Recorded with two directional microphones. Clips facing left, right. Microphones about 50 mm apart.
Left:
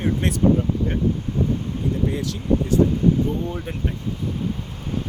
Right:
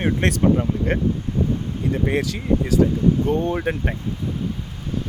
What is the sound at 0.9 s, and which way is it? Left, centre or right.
Speech, right.